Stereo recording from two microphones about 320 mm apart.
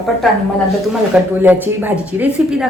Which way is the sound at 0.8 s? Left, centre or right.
Centre.